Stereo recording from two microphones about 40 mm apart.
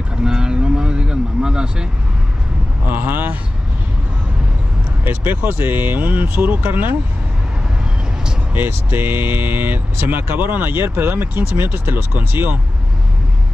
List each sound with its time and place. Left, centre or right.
0.2 s vehicle: centre
2.9 s speech: right
5.0 s speech: right
8.5 s speech: right